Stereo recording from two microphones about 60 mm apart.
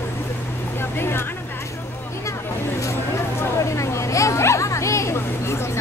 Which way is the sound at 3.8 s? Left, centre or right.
Left.